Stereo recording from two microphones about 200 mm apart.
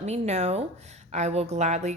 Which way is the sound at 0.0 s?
35° right (ahead or behind).